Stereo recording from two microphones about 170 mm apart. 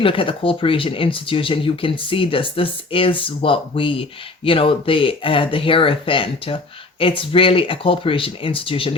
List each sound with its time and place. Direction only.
0.0 s speech: 30° left (ahead or behind)